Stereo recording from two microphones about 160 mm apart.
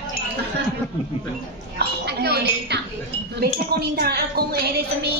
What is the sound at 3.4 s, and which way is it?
A woman's voice, 75° right (ahead or behind).